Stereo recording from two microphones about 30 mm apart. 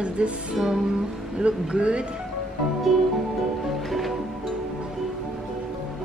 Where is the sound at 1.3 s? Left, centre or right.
Right.